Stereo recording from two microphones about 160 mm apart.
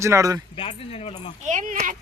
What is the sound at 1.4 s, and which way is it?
Speech, 55° right (ahead or behind).